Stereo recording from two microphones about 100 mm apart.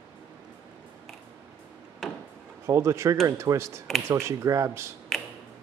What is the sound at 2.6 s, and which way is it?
Speech, 30° right (ahead or behind).